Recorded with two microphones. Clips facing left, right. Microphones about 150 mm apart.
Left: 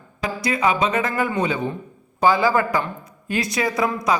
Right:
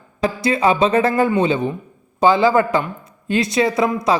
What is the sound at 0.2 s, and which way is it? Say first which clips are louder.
Speech: right 5 dB; 30° right (ahead or behind).